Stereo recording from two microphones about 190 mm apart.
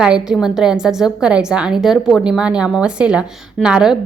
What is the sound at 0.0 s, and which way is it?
A woman's voice, 5° right (ahead or behind).